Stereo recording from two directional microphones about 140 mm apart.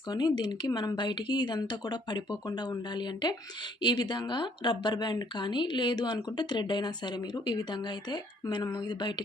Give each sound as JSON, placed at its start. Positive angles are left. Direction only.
{"t": 0.1, "sound": "speech", "side_deg": 30}